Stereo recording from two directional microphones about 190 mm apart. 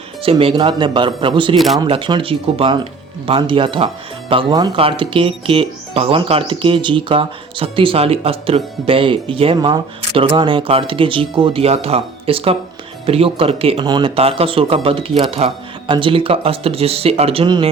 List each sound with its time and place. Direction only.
0.2 s speech: 30° right (ahead or behind)
1.5 s speech: centre (ahead or behind)
1.8 s speech: 25° right (ahead or behind)